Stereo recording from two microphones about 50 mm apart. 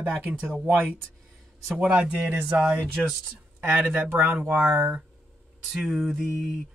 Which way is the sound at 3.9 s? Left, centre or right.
Right.